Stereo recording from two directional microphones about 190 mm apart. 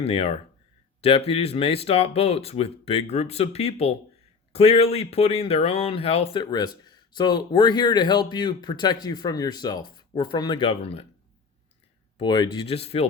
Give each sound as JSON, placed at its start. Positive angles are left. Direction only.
{"t": 0.0, "sound": "speech", "side_deg": 30}
{"t": 12.1, "sound": "speech", "side_deg": 25}